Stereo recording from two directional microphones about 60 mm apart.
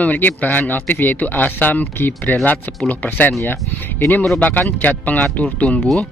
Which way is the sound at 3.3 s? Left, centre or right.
Left.